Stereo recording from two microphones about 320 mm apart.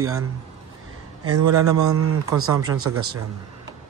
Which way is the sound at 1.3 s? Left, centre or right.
Right.